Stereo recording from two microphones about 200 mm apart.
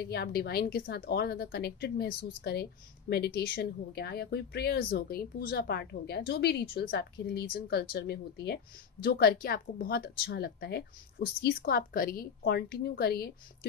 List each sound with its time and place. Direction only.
0.1 s speech: 50° left (ahead or behind)